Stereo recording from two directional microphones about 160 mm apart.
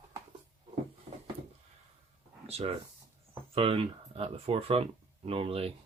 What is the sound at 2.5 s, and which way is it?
Speech, 40° right (ahead or behind).